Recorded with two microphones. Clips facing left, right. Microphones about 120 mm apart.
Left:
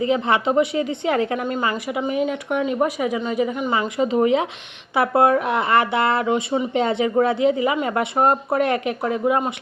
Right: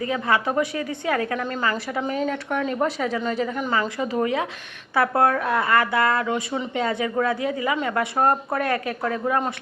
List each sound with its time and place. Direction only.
0.0 s a woman's voice: 20° left (ahead or behind)